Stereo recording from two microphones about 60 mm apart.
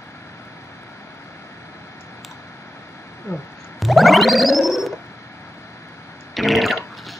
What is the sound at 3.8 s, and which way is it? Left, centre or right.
Music, centre.